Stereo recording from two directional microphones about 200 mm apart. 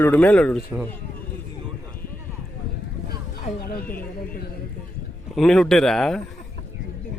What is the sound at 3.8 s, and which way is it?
Speech, 10° left (ahead or behind).